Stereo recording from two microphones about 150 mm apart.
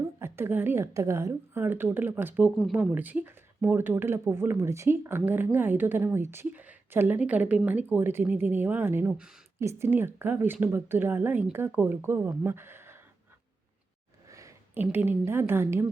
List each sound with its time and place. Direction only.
0.2 s speech: 15° right (ahead or behind)
14.3 s a sound: 20° right (ahead or behind)
14.9 s speech: 15° right (ahead or behind)